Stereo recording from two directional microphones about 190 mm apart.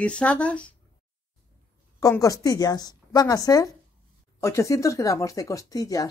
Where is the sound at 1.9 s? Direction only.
15° left (ahead or behind).